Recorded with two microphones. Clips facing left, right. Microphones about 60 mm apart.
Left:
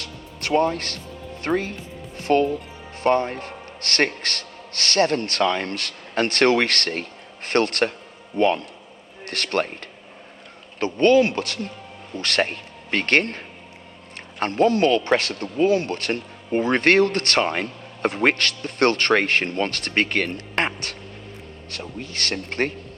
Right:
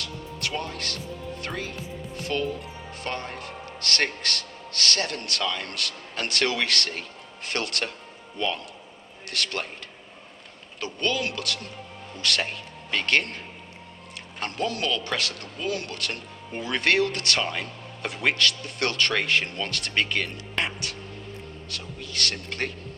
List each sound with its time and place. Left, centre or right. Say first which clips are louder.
0.0 s music: even; left
3.0 s a man's voice: left 13 dB; left
10.8 s a man's voice: left 12 dB; left
21.7 s a man's voice: left 6 dB; left